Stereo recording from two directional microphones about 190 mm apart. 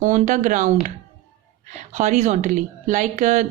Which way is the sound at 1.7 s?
40° right (ahead or behind).